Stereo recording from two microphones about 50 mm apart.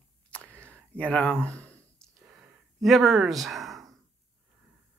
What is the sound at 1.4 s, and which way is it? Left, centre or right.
Speech, left.